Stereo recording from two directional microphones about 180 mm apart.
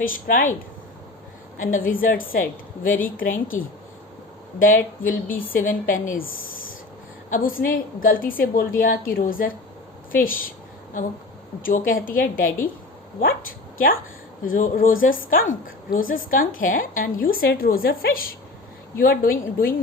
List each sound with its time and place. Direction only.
0.3 s a woman's voice: 50° left (ahead or behind)
1.5 s a woman's voice: 45° left (ahead or behind)
4.6 s a woman's voice: 50° left (ahead or behind)
7.3 s a woman's voice: 50° left (ahead or behind)
11.6 s a woman's voice: 50° left (ahead or behind)
13.7 s a woman's voice: 55° left (ahead or behind)